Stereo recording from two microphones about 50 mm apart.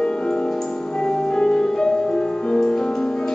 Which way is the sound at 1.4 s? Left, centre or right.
Centre.